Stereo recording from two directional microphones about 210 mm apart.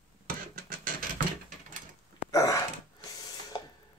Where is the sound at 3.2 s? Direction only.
15° left (ahead or behind).